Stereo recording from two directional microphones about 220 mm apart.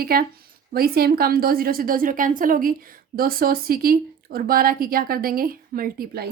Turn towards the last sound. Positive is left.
turn(degrees=-45)  # may be behind; listen again after turning